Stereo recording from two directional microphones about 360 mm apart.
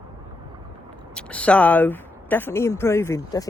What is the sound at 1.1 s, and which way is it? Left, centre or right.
A woman's voice, centre.